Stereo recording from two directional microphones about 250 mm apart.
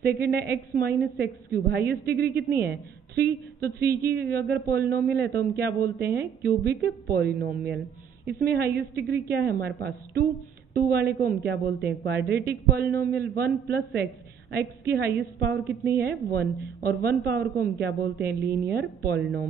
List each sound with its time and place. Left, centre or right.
0.0 s speech: right
14.5 s speech: right